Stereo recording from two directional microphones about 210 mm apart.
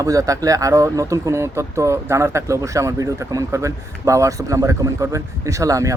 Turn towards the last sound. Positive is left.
turn(degrees=-15)  # may be behind; listen again after turning